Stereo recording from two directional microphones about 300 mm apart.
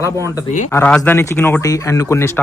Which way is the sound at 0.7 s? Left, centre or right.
Centre.